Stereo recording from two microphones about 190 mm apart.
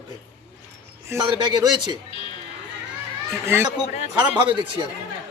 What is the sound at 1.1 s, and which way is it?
Speech, 20° right (ahead or behind).